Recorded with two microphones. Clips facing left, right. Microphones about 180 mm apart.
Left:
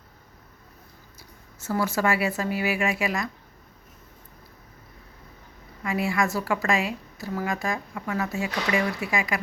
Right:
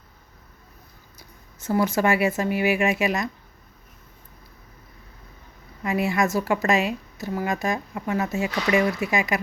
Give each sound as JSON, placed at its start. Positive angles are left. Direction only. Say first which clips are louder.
{"t": 1.6, "sound": "a woman's voice", "louder": "right 3 dB", "side_deg": -20}
{"t": 5.8, "sound": "a woman's voice", "louder": "right 3 dB", "side_deg": -20}